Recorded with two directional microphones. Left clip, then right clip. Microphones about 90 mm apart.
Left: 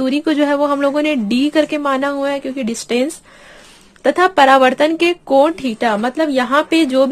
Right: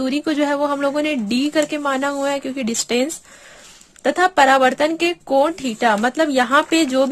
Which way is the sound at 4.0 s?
25° right (ahead or behind).